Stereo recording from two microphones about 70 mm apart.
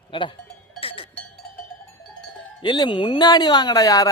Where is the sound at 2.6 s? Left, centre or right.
Left.